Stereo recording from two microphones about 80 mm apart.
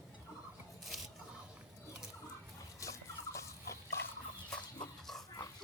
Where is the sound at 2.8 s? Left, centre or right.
Left.